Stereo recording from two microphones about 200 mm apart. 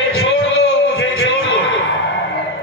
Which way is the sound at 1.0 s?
70° left (ahead or behind).